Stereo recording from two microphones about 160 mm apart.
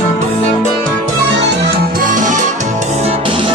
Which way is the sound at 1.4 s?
80° right.